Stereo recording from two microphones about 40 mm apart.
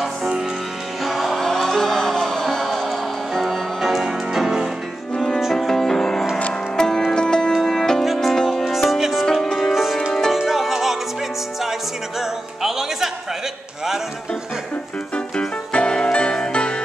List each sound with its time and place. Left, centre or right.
1.0 s music: centre
3.8 s music: centre
5.4 s music: centre
5.7 s music: centre
7.5 s music: centre
8.0 s music: centre
9.4 s music: centre
9.7 s music: centre
12.2 s music: centre
15.1 s music: left